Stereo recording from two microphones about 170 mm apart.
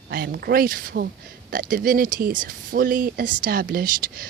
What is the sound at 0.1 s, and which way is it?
Speech, 65° right (ahead or behind).